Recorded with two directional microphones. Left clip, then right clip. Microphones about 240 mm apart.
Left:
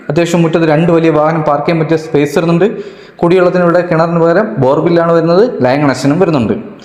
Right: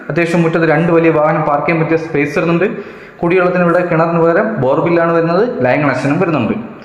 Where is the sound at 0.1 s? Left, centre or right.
Left.